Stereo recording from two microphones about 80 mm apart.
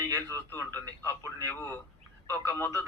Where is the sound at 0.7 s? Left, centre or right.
Right.